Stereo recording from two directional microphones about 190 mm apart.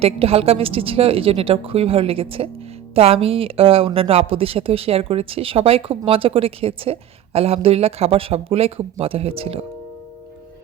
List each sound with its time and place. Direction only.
0.0 s a woman's voice: 30° right (ahead or behind)